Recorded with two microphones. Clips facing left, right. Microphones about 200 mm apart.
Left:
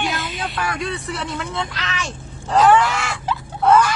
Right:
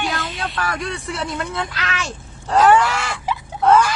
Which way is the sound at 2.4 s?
Centre (ahead or behind).